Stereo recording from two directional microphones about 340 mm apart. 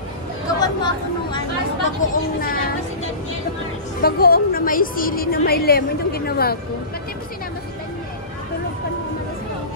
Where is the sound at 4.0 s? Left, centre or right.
Left.